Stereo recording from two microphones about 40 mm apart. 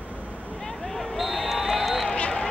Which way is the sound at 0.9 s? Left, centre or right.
Centre.